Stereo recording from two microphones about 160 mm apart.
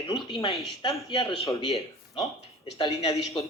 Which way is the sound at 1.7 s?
40° left (ahead or behind).